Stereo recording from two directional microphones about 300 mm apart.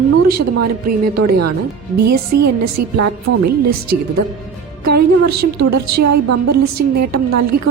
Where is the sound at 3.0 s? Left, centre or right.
Right.